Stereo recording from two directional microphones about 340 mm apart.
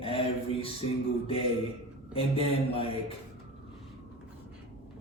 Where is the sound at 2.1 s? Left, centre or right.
Centre.